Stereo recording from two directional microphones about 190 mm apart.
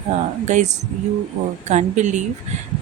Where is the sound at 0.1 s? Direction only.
35° right (ahead or behind).